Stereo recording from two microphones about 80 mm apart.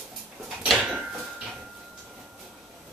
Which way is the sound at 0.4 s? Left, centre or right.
Centre.